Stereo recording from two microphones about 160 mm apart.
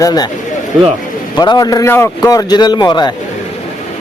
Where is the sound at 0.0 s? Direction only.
25° left (ahead or behind).